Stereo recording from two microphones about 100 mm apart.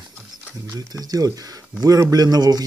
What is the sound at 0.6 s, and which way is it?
Speech, 35° right (ahead or behind).